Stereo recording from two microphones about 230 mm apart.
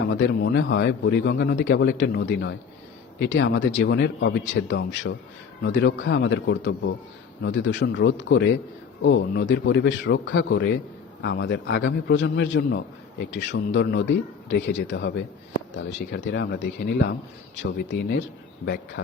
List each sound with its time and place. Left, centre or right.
0.1 s a man's voice: left